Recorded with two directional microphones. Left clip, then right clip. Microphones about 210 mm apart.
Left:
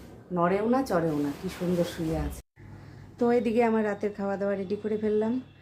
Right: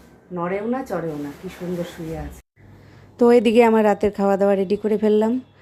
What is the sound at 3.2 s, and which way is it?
Speech, 40° right (ahead or behind).